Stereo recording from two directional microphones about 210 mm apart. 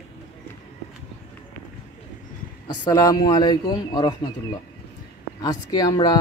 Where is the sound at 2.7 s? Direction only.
20° left (ahead or behind).